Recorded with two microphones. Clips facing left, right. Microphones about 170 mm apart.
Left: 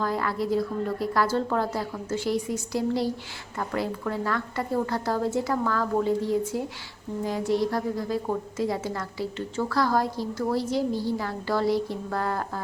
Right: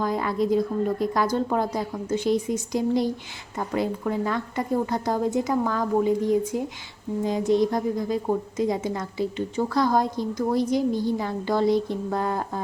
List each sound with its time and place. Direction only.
0.0 s a woman's voice: 20° right (ahead or behind)